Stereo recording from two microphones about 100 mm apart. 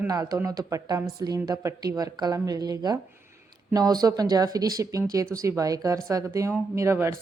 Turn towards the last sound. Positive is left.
turn(degrees=-25)  # may be behind; listen again after turning